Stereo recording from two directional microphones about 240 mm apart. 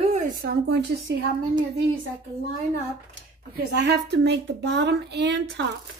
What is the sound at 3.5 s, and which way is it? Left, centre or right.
A woman's voice, right.